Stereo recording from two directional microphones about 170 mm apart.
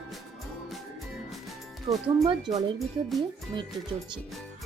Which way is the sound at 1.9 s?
30° right (ahead or behind).